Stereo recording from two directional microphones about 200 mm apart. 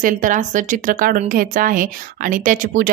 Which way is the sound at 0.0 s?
40° right (ahead or behind).